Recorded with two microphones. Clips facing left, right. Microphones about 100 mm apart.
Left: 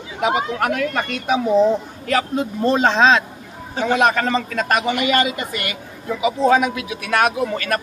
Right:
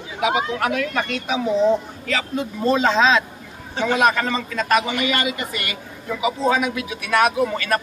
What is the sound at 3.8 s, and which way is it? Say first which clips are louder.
Speech: left 1 dB; 45° left (ahead or behind).